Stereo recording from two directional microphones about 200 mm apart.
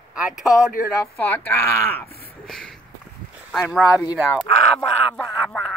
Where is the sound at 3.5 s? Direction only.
Centre (ahead or behind).